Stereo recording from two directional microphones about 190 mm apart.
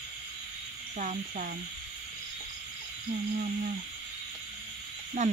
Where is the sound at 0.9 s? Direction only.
40° right (ahead or behind).